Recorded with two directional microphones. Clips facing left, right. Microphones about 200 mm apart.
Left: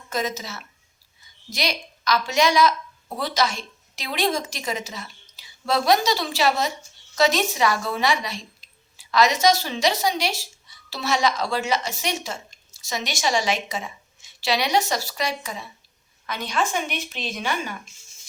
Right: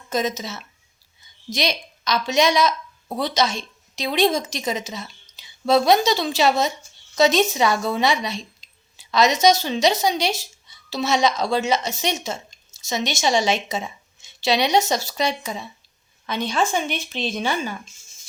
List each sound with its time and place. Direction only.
0.1 s a woman's voice: 20° right (ahead or behind)